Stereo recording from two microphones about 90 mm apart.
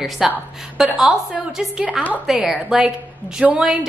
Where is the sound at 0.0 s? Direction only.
Centre (ahead or behind).